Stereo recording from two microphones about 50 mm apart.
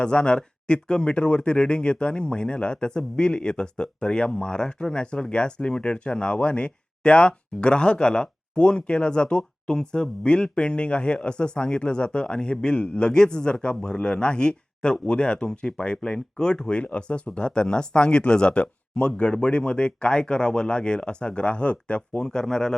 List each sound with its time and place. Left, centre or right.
0.0 s speech: centre